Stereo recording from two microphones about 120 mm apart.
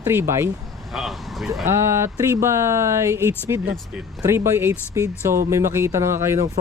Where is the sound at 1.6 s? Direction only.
20° right (ahead or behind).